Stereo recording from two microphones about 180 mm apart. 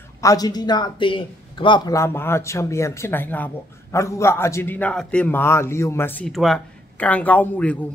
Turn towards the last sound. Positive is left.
turn(degrees=10)  # may be behind; listen again after turning